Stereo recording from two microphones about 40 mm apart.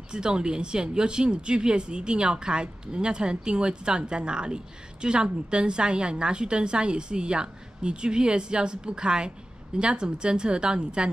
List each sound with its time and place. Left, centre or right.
0.1 s speech: right